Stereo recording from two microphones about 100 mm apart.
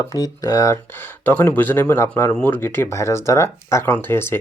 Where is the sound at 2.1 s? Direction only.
10° left (ahead or behind).